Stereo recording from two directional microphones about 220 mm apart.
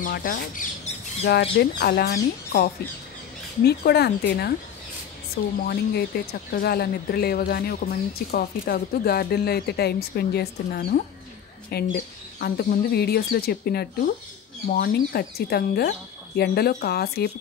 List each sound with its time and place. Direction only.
0.0 s speech: 40° left (ahead or behind)
5.7 s speech: 45° left (ahead or behind)